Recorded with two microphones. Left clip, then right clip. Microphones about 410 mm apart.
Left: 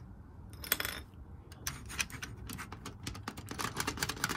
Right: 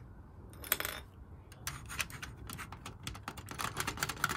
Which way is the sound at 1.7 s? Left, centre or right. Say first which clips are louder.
Left 1 dB; centre.